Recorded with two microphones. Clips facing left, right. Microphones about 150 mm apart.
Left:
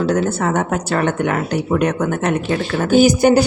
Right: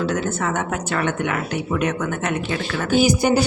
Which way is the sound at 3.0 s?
50° left (ahead or behind).